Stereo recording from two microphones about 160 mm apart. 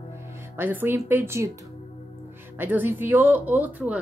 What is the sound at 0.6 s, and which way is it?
Speech, 10° right (ahead or behind).